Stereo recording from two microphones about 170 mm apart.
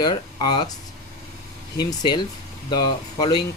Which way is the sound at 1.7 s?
25° left (ahead or behind).